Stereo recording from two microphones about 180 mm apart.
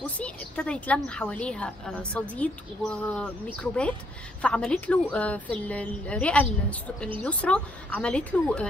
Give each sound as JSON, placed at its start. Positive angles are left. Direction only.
{"t": 0.0, "sound": "a woman's voice", "side_deg": 5}